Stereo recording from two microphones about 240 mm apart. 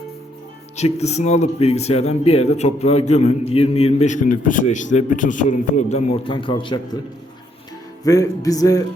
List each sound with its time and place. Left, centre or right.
0.8 s speech: left
8.0 s speech: centre